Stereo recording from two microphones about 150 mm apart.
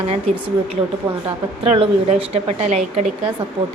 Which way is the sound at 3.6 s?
40° right (ahead or behind).